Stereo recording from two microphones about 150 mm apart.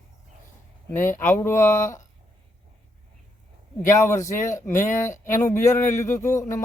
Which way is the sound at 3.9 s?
20° left (ahead or behind).